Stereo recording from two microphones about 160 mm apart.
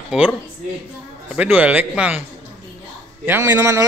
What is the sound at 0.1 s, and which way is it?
A man's voice, 5° right (ahead or behind).